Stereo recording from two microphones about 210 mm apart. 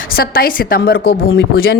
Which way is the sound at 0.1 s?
45° left (ahead or behind).